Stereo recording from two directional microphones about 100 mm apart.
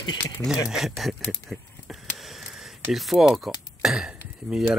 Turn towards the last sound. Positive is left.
turn(degrees=-5)  # may be behind; listen again after turning